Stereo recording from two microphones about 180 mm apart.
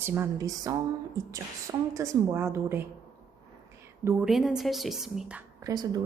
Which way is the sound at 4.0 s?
10° right (ahead or behind).